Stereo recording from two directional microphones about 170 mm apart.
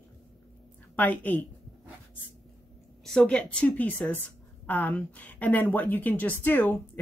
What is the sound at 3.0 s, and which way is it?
A woman's voice, 5° left (ahead or behind).